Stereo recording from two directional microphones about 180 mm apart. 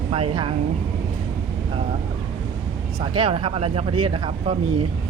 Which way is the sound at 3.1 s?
30° right (ahead or behind).